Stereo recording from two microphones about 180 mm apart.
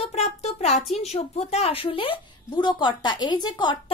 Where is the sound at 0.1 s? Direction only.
35° left (ahead or behind).